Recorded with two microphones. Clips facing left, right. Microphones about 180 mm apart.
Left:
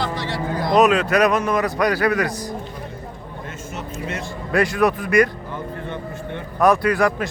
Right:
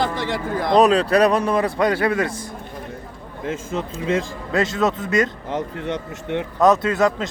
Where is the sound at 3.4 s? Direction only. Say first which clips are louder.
Right 9 dB; 90° right.